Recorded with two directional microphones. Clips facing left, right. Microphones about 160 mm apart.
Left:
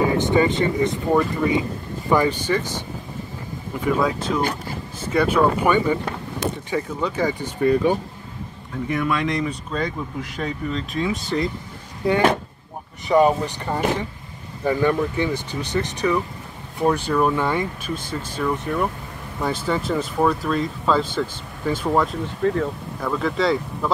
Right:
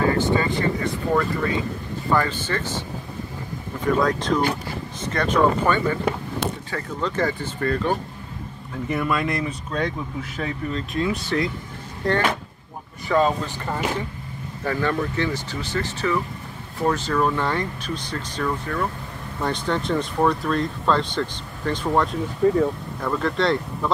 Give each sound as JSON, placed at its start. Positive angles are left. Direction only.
{"t": 0.0, "sound": "speech", "side_deg": 15}
{"t": 3.8, "sound": "speech", "side_deg": 5}
{"t": 8.8, "sound": "speech", "side_deg": 0}
{"t": 14.6, "sound": "speech", "side_deg": 15}
{"t": 19.4, "sound": "speech", "side_deg": 5}